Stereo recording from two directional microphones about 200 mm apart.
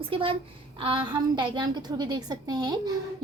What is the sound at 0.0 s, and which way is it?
A woman's voice, 25° right (ahead or behind).